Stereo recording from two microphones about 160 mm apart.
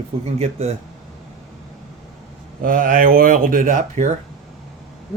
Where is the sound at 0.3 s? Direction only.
40° right (ahead or behind).